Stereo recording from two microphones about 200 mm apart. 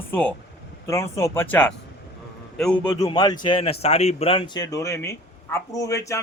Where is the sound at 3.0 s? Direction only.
20° left (ahead or behind).